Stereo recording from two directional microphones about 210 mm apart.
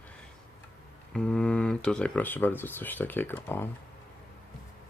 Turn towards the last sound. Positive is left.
turn(degrees=10)  # may be behind; listen again after turning